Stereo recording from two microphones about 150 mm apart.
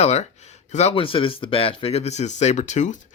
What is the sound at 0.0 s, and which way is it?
Speech, 45° left (ahead or behind).